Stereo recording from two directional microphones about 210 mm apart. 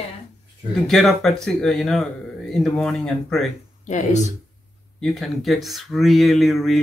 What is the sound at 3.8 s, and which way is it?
Speech, 35° left (ahead or behind).